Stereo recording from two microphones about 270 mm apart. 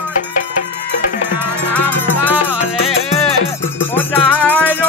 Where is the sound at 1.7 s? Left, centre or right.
Centre.